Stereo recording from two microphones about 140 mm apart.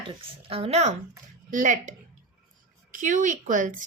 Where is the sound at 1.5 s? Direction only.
65° right (ahead or behind).